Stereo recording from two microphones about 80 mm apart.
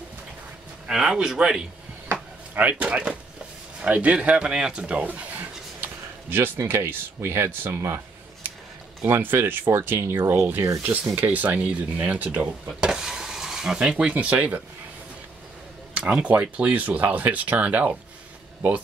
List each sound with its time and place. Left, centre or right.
0.8 s speech: centre; by 8.0 s right
9.0 s speech: right
16.0 s speech: centre